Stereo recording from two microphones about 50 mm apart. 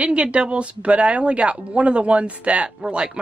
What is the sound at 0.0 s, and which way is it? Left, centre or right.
Speech, right.